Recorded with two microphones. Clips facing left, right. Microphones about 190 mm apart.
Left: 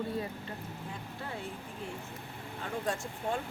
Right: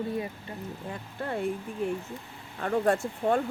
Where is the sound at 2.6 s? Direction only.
60° right (ahead or behind).